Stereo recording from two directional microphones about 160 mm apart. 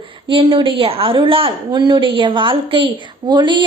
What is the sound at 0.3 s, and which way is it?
A woman's voice, 30° right (ahead or behind).